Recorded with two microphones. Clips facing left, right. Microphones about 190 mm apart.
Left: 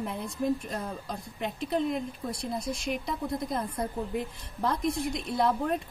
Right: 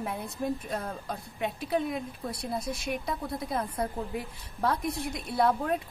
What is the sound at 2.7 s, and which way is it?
Speech, 55° right (ahead or behind).